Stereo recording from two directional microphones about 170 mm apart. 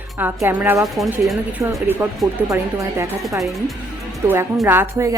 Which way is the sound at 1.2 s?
Centre (ahead or behind).